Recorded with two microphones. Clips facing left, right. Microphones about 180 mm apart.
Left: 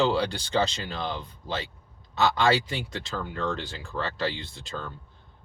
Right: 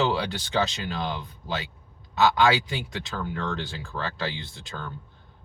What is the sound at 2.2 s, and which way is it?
Speech, centre (ahead or behind).